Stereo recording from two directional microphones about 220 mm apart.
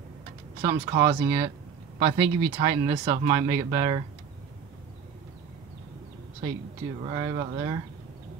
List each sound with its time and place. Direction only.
0.6 s speech: 25° right (ahead or behind)
7.0 s speech: 20° right (ahead or behind)